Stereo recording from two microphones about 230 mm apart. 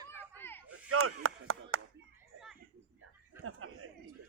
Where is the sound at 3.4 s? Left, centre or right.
Right.